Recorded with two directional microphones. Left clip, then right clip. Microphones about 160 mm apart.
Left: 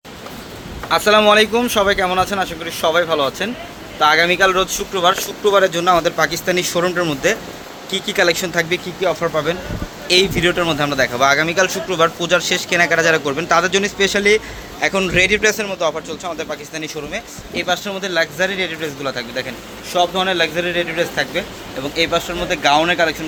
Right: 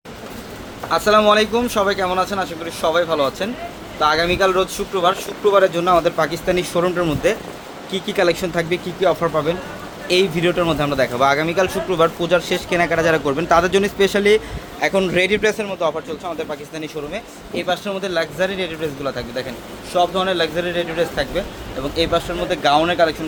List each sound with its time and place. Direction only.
0.9 s a man's voice: 15° left (ahead or behind); by 8.8 s 5° right (ahead or behind)
9.0 s speech: 25° right (ahead or behind)
9.3 s a man's voice: 5° right (ahead or behind)